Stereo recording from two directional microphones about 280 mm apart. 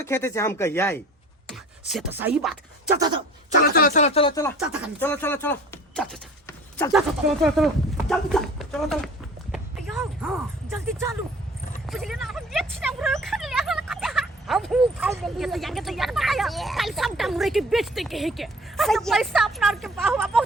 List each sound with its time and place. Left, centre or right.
0.0 s speech: centre
1.9 s speech: centre
3.6 s speech: left; by 4.5 s centre
4.6 s speech: centre
7.4 s speech: centre
9.5 s a sound: centre
11.9 s speech: centre